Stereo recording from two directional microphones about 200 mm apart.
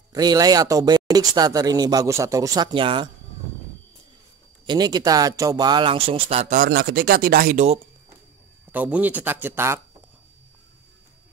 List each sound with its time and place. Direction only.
0.1 s speech: 20° right (ahead or behind)
4.6 s speech: 20° right (ahead or behind); by 7.6 s 45° right (ahead or behind)
8.7 s speech: 5° right (ahead or behind)